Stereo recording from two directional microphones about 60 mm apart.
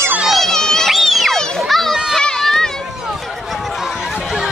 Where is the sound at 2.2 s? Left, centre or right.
Centre.